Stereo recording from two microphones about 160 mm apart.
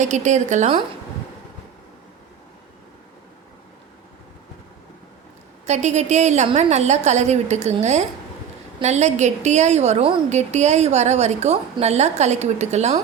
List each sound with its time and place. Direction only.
0.0 s a woman's voice: 50° right (ahead or behind)
5.6 s a woman's voice: 45° right (ahead or behind)